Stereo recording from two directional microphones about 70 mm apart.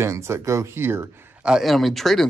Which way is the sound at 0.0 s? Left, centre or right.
Right.